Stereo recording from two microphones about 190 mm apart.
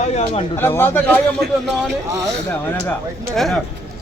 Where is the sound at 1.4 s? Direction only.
55° right (ahead or behind).